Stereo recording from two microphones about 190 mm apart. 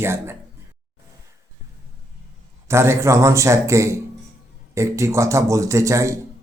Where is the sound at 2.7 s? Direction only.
15° right (ahead or behind).